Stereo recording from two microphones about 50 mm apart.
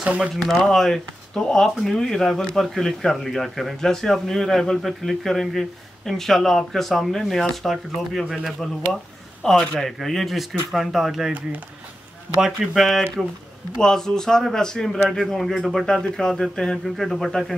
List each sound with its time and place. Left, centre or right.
0.0 s speech: right
0.4 s speech: centre
12.4 s speech: centre
13.2 s speech: centre